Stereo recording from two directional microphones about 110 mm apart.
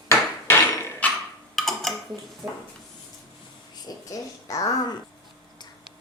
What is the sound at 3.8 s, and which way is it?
Speech, 30° left (ahead or behind).